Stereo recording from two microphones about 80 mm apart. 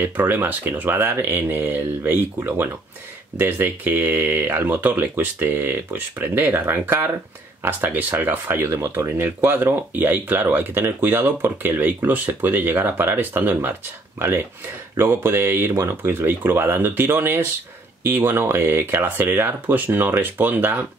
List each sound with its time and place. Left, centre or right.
0.0 s speech: right
15.0 s speech: right